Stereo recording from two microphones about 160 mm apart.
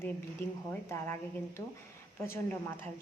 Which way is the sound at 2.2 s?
15° left (ahead or behind).